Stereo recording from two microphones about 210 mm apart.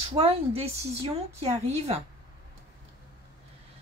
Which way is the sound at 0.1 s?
30° right (ahead or behind).